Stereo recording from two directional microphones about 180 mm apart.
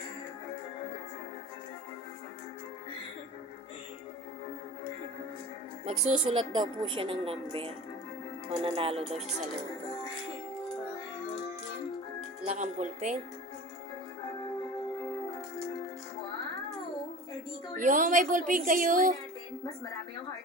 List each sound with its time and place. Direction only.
5.8 s a woman's voice: 35° right (ahead or behind)
8.4 s music: 30° right (ahead or behind)
12.5 s music: 40° right (ahead or behind)
17.7 s a woman's voice: 45° right (ahead or behind)